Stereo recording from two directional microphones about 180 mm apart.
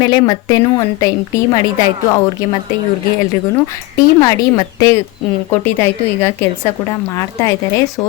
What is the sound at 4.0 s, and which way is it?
A woman's voice, 20° left (ahead or behind).